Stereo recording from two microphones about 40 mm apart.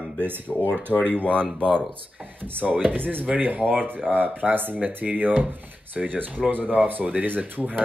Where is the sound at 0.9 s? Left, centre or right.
Left.